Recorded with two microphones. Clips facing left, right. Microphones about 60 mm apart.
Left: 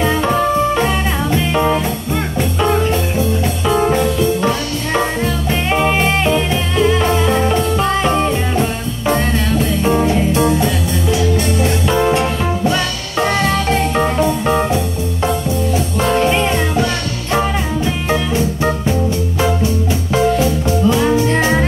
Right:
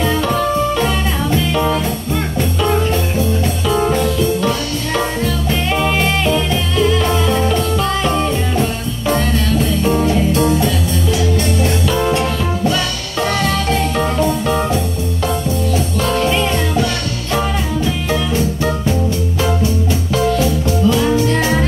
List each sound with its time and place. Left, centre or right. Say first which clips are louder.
0.0 s music: left 1 dB; left
3.6 s music: left 2 dB; left
9.8 s music: left 1 dB; left
15.7 s music: left 3 dB; left
20.3 s music: left 1 dB; left